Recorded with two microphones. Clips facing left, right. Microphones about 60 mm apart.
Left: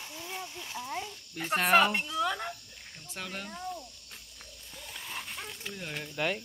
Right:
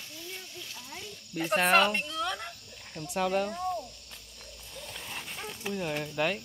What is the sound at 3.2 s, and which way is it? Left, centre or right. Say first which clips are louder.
Speech: right 12 dB; centre.